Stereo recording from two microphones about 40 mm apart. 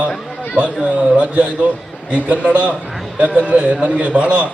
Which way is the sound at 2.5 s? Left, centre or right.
Right.